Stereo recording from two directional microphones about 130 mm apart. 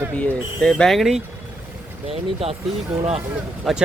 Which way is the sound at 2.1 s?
50° right (ahead or behind).